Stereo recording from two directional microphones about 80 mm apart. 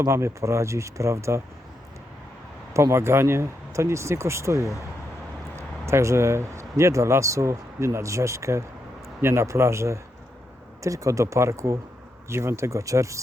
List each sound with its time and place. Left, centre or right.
0.0 s speech: right
2.7 s speech: right